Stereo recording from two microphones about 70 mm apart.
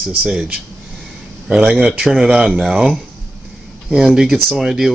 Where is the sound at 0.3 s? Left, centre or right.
Centre.